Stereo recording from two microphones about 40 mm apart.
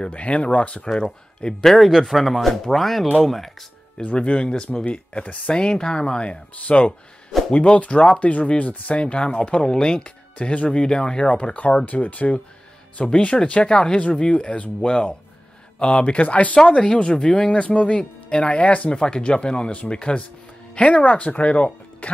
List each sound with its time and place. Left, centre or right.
0.1 s speech: left
1.7 s speech: centre
4.0 s speech: left
5.5 s speech: left
11.3 s speech: left
14.8 s speech: left
16.5 s speech: left
18.9 s speech: left